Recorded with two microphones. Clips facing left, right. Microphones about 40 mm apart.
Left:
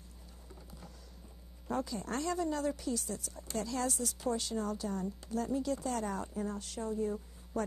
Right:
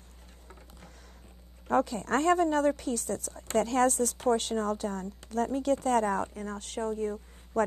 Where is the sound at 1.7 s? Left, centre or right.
Right.